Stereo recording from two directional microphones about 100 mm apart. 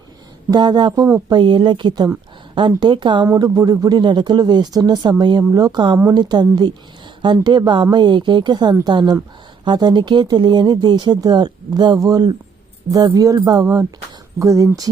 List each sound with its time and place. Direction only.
0.5 s speech: 50° right (ahead or behind)
3.3 s speech: 40° right (ahead or behind)
5.4 s speech: 35° right (ahead or behind)